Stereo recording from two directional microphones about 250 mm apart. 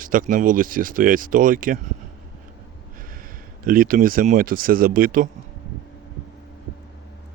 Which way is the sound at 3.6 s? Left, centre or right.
Right.